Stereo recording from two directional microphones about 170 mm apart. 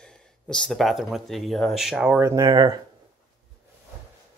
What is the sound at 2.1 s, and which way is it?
Speech, 15° right (ahead or behind).